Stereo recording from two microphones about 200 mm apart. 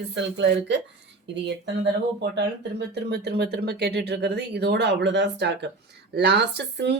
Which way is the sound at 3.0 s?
55° right (ahead or behind).